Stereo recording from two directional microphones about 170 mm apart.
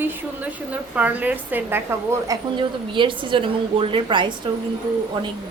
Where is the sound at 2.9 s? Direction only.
30° right (ahead or behind).